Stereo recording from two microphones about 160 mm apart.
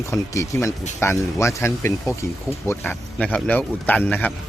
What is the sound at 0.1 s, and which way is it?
Speech, 15° left (ahead or behind).